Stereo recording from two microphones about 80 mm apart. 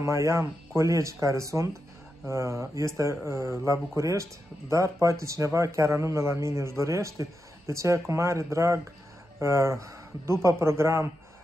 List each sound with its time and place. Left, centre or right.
0.0 s a man's voice: right